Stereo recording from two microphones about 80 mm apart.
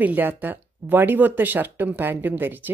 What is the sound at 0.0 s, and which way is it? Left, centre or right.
Speech, right.